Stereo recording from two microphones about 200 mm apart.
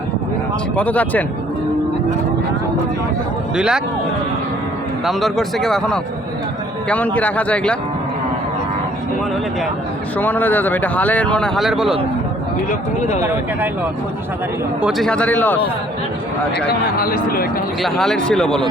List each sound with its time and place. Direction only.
0.8 s speech: 5° left (ahead or behind)
3.5 s speech: 5° right (ahead or behind)
5.0 s speech: centre (ahead or behind)
10.2 s speech: 10° left (ahead or behind)
14.8 s speech: centre (ahead or behind)
17.0 s speech: 50° left (ahead or behind)
17.8 s speech: centre (ahead or behind)